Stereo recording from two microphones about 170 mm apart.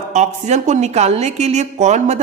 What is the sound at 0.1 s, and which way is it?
A woman's voice, 45° right (ahead or behind).